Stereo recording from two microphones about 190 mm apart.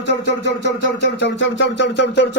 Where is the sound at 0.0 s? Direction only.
65° left (ahead or behind).